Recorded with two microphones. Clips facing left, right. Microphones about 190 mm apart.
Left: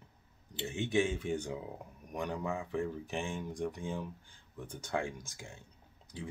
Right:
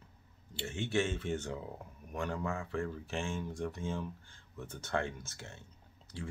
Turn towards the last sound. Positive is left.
turn(degrees=15)  # may be behind; listen again after turning